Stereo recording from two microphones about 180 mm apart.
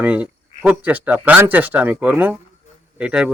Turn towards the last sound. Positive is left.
turn(degrees=-5)  # may be behind; listen again after turning